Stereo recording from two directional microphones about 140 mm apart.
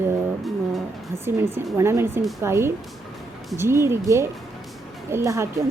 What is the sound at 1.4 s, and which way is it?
Speech, 20° right (ahead or behind).